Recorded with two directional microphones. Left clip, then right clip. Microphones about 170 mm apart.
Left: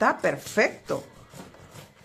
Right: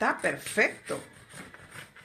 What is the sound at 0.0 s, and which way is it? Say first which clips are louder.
Speech: left 5 dB; 25° left (ahead or behind).